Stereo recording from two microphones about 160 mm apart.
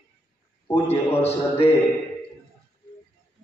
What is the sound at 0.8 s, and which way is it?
Speech, 40° left (ahead or behind).